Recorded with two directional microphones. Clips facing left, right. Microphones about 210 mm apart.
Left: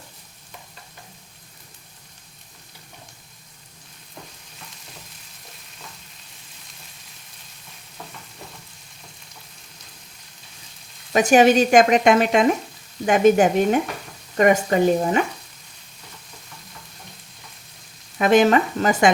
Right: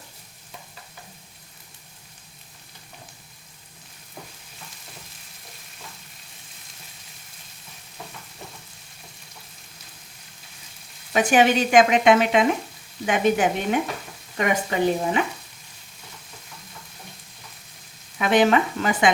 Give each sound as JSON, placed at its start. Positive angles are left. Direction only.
{"t": 11.1, "sound": "speech", "side_deg": 40}
{"t": 18.2, "sound": "speech", "side_deg": 45}